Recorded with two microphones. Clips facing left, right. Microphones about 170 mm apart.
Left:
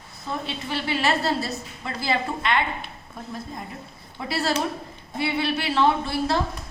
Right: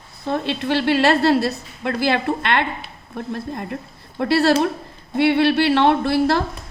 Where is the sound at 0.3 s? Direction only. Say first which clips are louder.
Right 9 dB; 75° right (ahead or behind).